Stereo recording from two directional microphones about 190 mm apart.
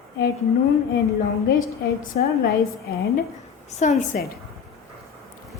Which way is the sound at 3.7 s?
40° left (ahead or behind).